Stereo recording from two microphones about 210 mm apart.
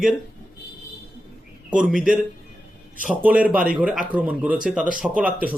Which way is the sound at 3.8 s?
5° right (ahead or behind).